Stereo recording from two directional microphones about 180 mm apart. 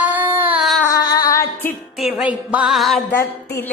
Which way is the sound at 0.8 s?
20° left (ahead or behind).